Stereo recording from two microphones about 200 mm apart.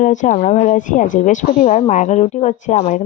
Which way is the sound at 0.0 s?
40° left (ahead or behind).